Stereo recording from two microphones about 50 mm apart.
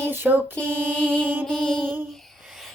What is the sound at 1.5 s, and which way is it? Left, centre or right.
Music, centre.